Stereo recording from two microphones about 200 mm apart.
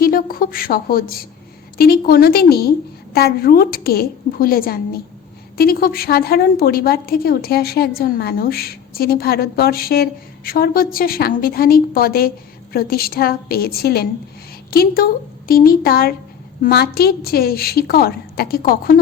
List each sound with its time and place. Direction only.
0.0 s a woman's voice: 45° left (ahead or behind)